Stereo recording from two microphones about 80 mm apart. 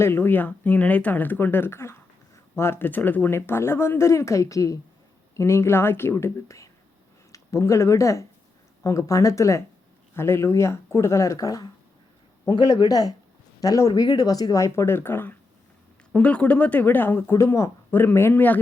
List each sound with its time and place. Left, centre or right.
0.0 s speech: left
5.4 s speech: left
12.6 s speech: left
16.1 s speech: centre
17.3 s speech: left